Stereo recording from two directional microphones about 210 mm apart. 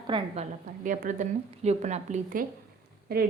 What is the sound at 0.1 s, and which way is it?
Speech, 20° right (ahead or behind).